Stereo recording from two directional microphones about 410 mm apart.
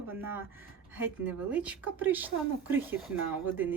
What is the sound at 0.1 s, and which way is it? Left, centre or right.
Speech, centre.